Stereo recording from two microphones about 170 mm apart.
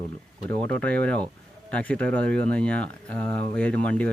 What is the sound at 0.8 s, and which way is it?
Speech, 5° left (ahead or behind).